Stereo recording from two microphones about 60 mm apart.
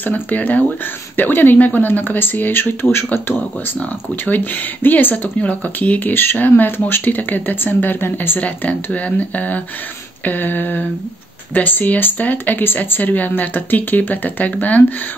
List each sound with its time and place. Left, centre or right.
0.0 s speech: left
4.8 s speech: left
8.4 s speech: left